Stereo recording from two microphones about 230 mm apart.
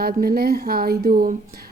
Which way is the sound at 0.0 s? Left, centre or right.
Right.